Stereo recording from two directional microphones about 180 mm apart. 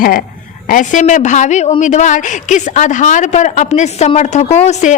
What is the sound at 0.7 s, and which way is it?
A woman's voice, 45° left (ahead or behind).